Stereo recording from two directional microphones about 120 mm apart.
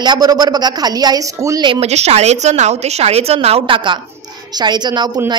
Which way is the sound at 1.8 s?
65° right (ahead or behind).